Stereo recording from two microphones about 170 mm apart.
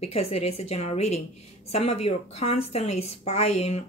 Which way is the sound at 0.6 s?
40° left (ahead or behind).